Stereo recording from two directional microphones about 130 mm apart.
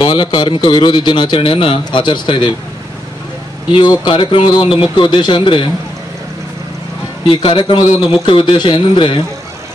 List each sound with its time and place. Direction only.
0.0 s a man's voice: 35° left (ahead or behind)
3.7 s a man's voice: 35° left (ahead or behind)
7.2 s a man's voice: 40° left (ahead or behind)